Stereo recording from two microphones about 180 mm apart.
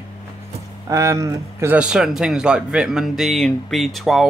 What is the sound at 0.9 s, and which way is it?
Speech, 15° right (ahead or behind).